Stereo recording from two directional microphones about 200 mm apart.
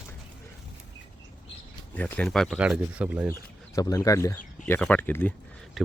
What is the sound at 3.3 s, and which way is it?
Speech, 15° left (ahead or behind).